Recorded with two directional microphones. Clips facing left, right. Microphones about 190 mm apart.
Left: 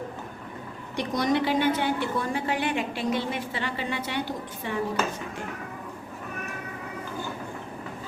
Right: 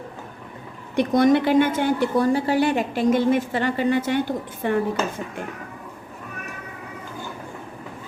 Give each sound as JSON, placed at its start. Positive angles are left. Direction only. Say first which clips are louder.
{"t": 0.9, "sound": "a woman's voice", "louder": "right 8 dB", "side_deg": -55}